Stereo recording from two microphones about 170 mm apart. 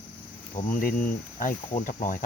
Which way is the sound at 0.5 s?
50° left (ahead or behind).